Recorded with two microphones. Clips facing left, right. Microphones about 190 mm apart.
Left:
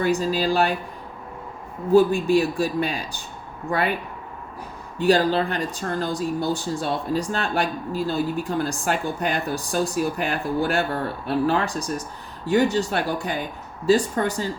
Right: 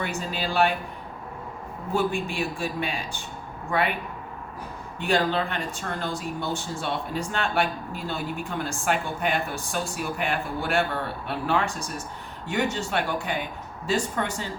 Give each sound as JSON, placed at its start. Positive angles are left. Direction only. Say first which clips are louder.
{"t": 0.0, "sound": "speech", "louder": "left 9 dB", "side_deg": 35}
{"t": 1.9, "sound": "speech", "louder": "left 10 dB", "side_deg": 35}
{"t": 4.9, "sound": "speech", "louder": "left 5 dB", "side_deg": 35}